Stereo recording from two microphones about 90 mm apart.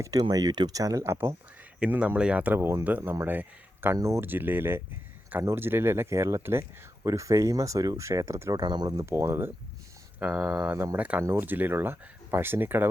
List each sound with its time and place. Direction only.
0.0 s speech: 45° right (ahead or behind)
1.8 s speech: 15° right (ahead or behind)
3.9 s speech: 35° right (ahead or behind)
4.3 s speech: 20° right (ahead or behind)
8.6 s speech: 50° right (ahead or behind)
9.0 s speech: 30° right (ahead or behind)
10.2 s speech: 15° right (ahead or behind)
11.2 s speech: 25° right (ahead or behind)